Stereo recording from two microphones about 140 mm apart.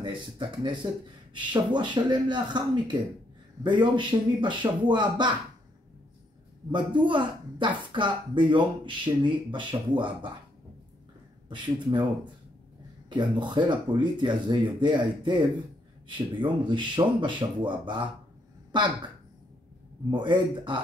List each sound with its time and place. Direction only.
0.0 s speech: 35° right (ahead or behind)
6.7 s speech: 35° right (ahead or behind)
11.4 s speech: 35° right (ahead or behind)
13.1 s speech: 35° right (ahead or behind)
20.1 s speech: 35° right (ahead or behind)